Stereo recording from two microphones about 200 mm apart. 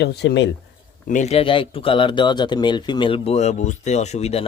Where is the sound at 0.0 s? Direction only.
60° left (ahead or behind).